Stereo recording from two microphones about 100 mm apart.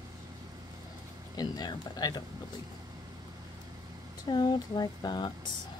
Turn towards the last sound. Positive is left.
turn(degrees=45)  # may be behind; listen again after turning